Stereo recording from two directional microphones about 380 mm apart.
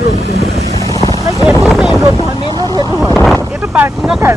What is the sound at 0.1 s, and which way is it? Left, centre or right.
Speech, centre.